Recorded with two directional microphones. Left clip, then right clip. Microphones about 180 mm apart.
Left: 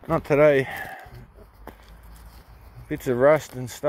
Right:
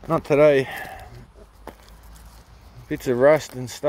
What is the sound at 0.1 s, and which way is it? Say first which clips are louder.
Speech: right 2 dB; 15° right (ahead or behind).